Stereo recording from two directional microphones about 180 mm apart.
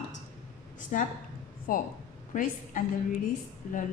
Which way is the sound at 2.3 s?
45° left (ahead or behind).